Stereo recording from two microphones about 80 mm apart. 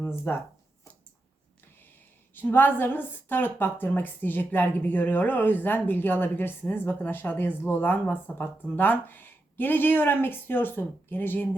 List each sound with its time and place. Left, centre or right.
0.3 s speech: left
2.3 s a woman's voice: left